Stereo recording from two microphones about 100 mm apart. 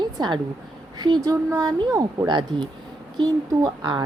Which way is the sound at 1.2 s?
40° right (ahead or behind).